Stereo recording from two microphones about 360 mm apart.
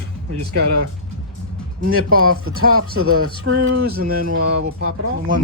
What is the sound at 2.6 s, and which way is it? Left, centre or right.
Speech, right.